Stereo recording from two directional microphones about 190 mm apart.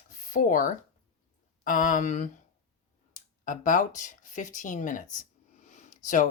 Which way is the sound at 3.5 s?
45° left (ahead or behind).